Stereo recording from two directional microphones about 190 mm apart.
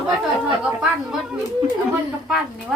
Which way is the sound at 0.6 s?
Centre (ahead or behind).